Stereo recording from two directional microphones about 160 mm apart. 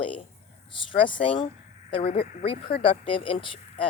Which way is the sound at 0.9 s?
30° left (ahead or behind).